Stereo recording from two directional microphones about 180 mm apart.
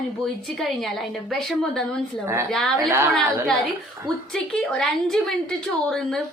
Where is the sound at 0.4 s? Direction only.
Centre (ahead or behind).